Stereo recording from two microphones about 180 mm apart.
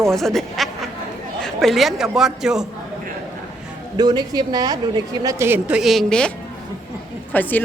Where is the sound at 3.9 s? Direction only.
20° right (ahead or behind); by 6.3 s 5° left (ahead or behind).